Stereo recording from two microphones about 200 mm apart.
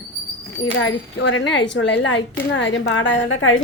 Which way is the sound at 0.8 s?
70° left (ahead or behind).